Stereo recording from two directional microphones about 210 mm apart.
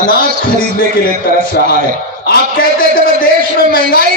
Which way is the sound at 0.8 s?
45° left (ahead or behind).